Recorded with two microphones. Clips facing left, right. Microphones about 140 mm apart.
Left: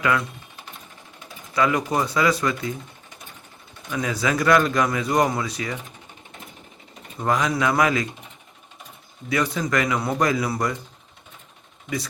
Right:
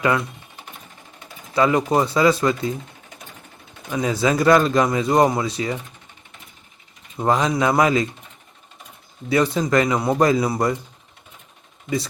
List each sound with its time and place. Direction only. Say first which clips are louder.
1.5 s speech: right 4 dB; 30° right (ahead or behind)
3.9 s speech: right 4 dB; 25° right (ahead or behind)
7.2 s speech: right 3 dB; 30° right (ahead or behind)
9.3 s speech: right 5 dB; 25° right (ahead or behind)